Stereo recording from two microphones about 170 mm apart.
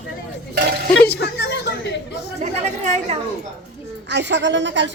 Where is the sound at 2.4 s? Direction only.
40° right (ahead or behind).